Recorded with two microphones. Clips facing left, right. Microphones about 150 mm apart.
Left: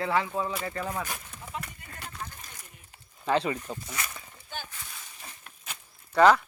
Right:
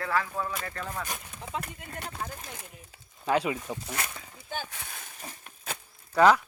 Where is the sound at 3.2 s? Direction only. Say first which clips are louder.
Even; 10° right (ahead or behind).